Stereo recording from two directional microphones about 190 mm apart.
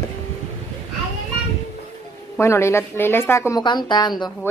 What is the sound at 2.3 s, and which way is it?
A woman's voice, 15° left (ahead or behind).